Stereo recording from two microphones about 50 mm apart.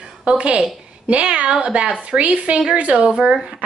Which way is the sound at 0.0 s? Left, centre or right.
Centre.